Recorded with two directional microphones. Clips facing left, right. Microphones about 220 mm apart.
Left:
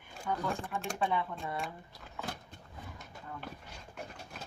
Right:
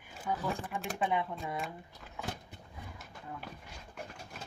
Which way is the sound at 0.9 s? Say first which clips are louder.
Right 1 dB; 15° right (ahead or behind).